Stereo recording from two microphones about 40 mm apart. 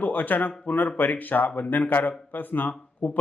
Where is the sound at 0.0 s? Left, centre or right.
Left.